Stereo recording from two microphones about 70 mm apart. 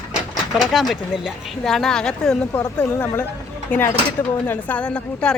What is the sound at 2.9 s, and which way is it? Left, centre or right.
A woman's voice, left.